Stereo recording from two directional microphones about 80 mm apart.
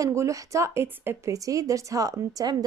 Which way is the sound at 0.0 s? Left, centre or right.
Right.